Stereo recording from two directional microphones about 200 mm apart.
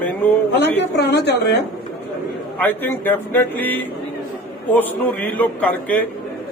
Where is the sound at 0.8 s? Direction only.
55° left (ahead or behind).